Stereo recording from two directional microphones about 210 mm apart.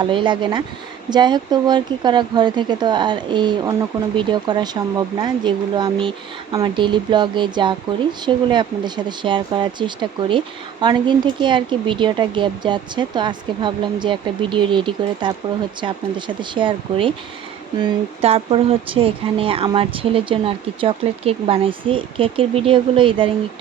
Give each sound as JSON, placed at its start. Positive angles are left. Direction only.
{"t": 0.0, "sound": "speech", "side_deg": -25}